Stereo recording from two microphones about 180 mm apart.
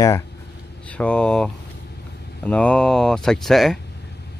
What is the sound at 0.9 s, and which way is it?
Speech, 5° left (ahead or behind).